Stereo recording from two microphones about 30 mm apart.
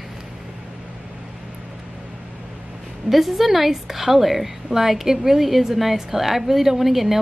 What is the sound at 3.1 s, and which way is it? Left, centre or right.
A woman's voice, centre.